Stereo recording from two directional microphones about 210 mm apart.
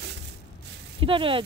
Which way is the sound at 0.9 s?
25° right (ahead or behind).